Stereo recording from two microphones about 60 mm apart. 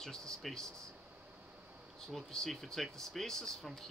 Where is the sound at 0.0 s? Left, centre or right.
Centre.